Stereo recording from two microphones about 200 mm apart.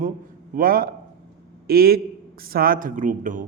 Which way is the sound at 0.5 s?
45° right (ahead or behind).